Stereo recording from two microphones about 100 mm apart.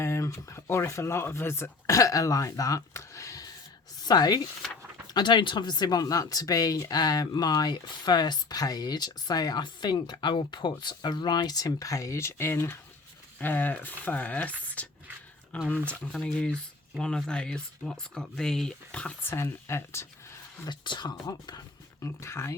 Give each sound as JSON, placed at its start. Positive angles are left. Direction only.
{"t": 0.0, "sound": "speech", "side_deg": 30}
{"t": 14.6, "sound": "a sound", "side_deg": 15}
{"t": 15.5, "sound": "speech", "side_deg": 15}
{"t": 19.3, "sound": "speech", "side_deg": 25}
{"t": 20.7, "sound": "speech", "side_deg": 50}
{"t": 22.0, "sound": "speech", "side_deg": 25}